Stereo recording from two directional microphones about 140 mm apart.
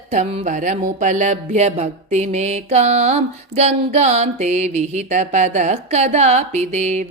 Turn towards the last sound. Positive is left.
turn(degrees=-55)  # may be behind; listen again after turning